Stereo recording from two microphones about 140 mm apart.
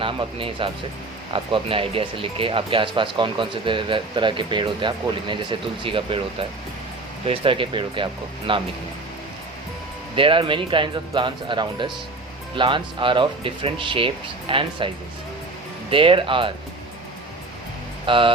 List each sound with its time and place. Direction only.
0.0 s speech: 40° right (ahead or behind)
7.3 s speech: 40° right (ahead or behind)
10.2 s speech: 40° right (ahead or behind)
15.9 s speech: 40° right (ahead or behind)
18.0 s speech: 35° right (ahead or behind)